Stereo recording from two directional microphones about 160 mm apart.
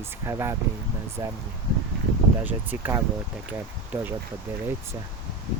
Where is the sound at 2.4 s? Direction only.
10° right (ahead or behind).